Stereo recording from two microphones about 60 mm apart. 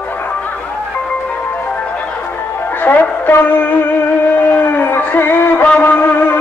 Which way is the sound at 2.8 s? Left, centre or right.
Left.